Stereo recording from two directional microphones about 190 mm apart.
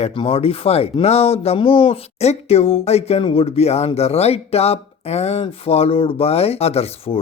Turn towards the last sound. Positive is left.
turn(degrees=30)  # may be behind; listen again after turning